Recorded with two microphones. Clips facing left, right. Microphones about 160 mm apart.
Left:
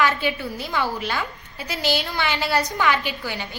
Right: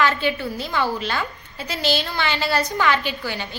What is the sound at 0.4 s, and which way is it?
Speech, 25° right (ahead or behind).